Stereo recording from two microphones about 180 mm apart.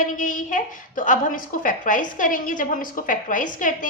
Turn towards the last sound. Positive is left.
turn(degrees=45)  # may be behind; listen again after turning